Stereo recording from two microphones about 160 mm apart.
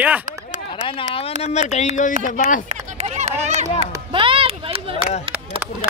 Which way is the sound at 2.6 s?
45° right (ahead or behind).